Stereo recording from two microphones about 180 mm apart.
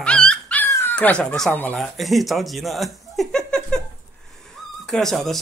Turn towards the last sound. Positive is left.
turn(degrees=0)  # may be behind; listen again after turning